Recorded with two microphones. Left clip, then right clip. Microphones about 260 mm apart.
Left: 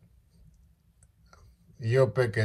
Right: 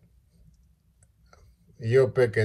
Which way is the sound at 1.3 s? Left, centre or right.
Left.